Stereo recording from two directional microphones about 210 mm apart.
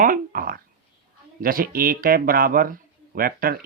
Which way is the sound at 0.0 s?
40° right (ahead or behind).